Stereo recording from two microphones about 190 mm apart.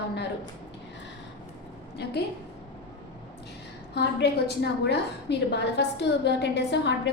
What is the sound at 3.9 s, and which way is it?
A woman's voice, 60° left (ahead or behind).